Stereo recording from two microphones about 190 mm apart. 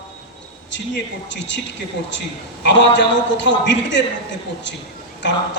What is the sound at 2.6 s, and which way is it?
A man's voice, 70° left (ahead or behind).